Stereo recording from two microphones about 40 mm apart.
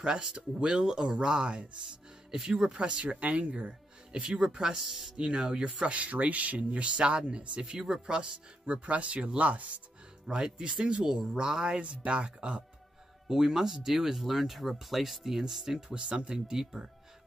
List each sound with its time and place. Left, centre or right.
0.0 s speech: right
2.3 s speech: centre
2.6 s speech: right
3.5 s speech: right
5.7 s speech: right
10.2 s speech: centre
11.8 s speech: right
13.3 s speech: centre
15.9 s speech: right